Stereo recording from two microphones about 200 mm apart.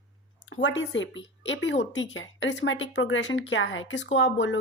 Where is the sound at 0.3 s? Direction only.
75° left (ahead or behind).